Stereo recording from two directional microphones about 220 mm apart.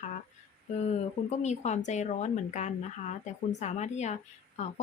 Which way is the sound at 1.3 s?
30° left (ahead or behind).